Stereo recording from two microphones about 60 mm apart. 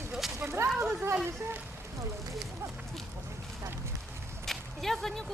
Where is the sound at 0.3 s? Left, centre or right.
Right.